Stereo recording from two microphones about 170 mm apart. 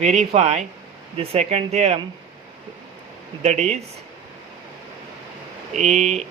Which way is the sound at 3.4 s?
40° right (ahead or behind).